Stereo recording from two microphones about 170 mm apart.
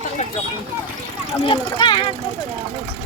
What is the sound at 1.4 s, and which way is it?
Speech, 30° left (ahead or behind).